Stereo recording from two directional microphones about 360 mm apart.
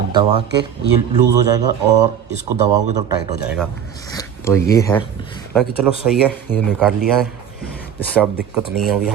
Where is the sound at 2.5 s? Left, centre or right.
Right.